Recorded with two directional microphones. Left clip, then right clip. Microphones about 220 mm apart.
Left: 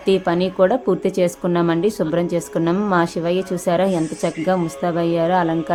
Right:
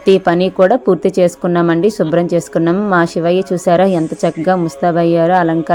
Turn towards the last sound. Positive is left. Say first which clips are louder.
# right 6 dB
turn(degrees=-25)  # may be behind; listen again after turning